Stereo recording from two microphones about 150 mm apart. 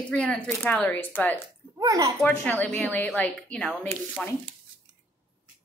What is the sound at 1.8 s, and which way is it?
Speech, 25° right (ahead or behind).